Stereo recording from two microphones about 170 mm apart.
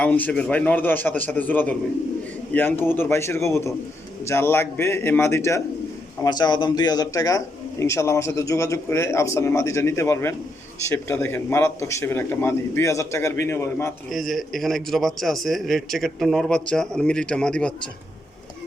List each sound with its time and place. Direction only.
0.0 s a man's voice: 10° left (ahead or behind)
14.1 s a man's voice: centre (ahead or behind)